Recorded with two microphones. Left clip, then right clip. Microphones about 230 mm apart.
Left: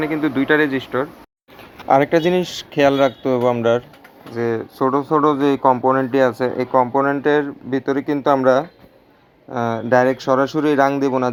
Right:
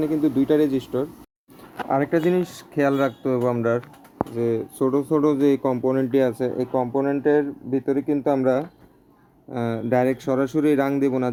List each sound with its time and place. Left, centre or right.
0.2 s speech: centre
1.8 s speech: left
2.4 s speech: centre
6.6 s speech: left
6.9 s speech: centre